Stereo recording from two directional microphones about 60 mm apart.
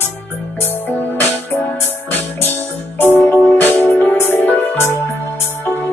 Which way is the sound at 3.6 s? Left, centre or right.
Left.